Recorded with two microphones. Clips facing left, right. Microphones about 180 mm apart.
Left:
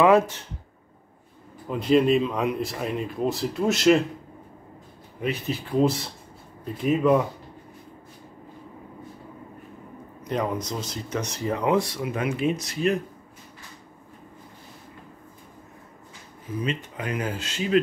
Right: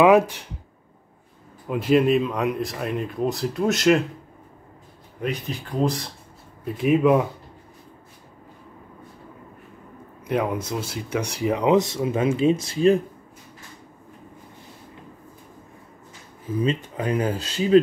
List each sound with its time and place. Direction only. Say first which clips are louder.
0.0 s speech: right 2 dB; 15° right (ahead or behind)
1.7 s speech: right 1 dB; 5° right (ahead or behind)
5.2 s speech: even; 5° left (ahead or behind)
6.6 s speech: right 3 dB; 10° right (ahead or behind)
10.2 s speech: right 3 dB; 5° right (ahead or behind); by 13.0 s 30° right (ahead or behind)
16.6 s speech: right 5 dB; 30° right (ahead or behind)